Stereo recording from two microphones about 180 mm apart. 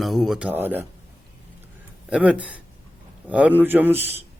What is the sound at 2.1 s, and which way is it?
A man's voice, 5° right (ahead or behind).